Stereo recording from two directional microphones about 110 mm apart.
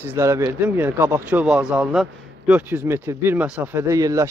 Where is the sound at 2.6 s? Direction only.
20° right (ahead or behind).